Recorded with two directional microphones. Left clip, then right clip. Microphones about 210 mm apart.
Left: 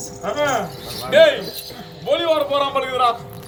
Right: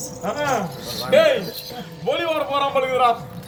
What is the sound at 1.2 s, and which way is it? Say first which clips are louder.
A man's voice: left 4 dB; 25° left (ahead or behind).